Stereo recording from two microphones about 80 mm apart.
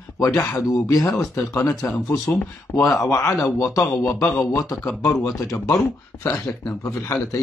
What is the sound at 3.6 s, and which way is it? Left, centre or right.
Speech, left.